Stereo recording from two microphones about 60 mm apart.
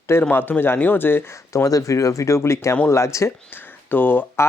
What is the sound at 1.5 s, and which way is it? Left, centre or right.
Speech, left.